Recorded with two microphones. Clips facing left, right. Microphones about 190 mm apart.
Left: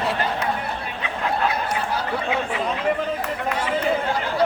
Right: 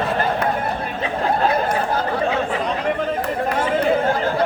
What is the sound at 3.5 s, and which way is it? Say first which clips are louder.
Chatter: right 4 dB; 50° right (ahead or behind).